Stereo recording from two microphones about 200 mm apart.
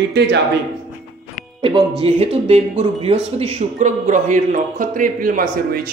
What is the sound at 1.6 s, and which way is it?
Speech, 25° right (ahead or behind).